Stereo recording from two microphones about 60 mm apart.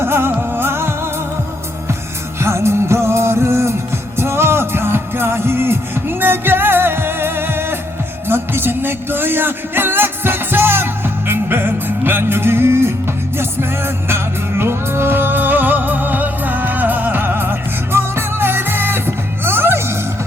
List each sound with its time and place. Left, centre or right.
0.0 s music: right
2.4 s music: right